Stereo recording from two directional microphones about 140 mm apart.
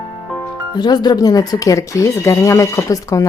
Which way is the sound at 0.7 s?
30° left (ahead or behind).